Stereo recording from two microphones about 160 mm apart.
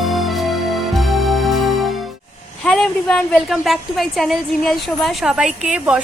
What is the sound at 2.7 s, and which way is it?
A woman's voice, 5° left (ahead or behind).